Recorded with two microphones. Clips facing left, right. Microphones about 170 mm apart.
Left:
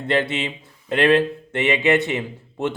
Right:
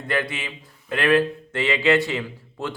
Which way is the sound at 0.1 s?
25° left (ahead or behind).